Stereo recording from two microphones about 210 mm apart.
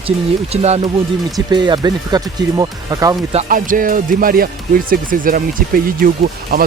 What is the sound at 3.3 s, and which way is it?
Speech, 35° right (ahead or behind).